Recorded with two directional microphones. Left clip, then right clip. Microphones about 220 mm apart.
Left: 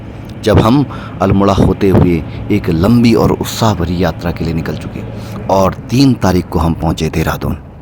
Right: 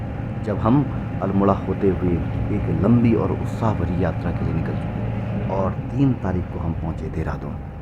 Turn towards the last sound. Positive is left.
turn(degrees=35)  # may be behind; listen again after turning